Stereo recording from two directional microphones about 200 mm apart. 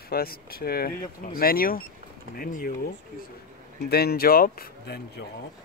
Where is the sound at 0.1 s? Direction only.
50° left (ahead or behind).